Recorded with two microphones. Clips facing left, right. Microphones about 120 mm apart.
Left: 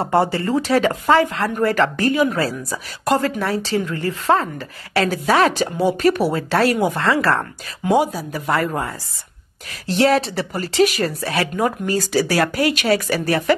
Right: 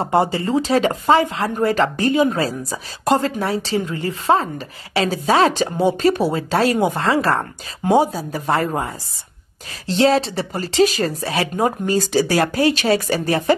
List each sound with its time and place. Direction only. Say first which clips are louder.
0.0 s speech: even; 20° right (ahead or behind)